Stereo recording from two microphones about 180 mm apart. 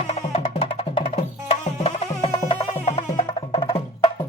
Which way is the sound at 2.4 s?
25° left (ahead or behind).